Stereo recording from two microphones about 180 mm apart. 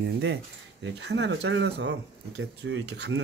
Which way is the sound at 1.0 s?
75° right (ahead or behind).